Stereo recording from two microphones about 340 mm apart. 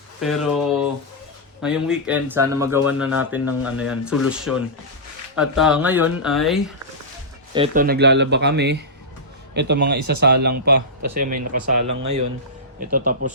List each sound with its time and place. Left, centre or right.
0.2 s speech: centre
7.5 s speech: centre
12.8 s speech: right